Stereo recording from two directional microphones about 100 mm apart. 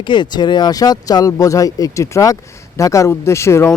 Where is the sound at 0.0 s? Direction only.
50° left (ahead or behind).